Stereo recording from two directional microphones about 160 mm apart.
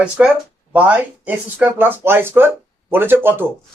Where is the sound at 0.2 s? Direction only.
10° right (ahead or behind).